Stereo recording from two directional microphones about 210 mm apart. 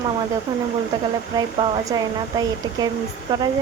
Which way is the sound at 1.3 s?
20° right (ahead or behind).